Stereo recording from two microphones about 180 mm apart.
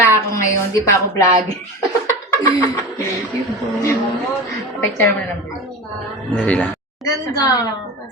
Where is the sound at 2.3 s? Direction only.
20° left (ahead or behind).